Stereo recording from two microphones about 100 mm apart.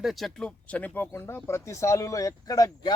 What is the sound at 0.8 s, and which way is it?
A man's voice, 15° left (ahead or behind).